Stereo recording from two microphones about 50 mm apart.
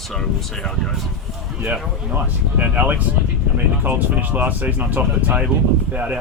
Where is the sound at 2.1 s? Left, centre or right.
Right.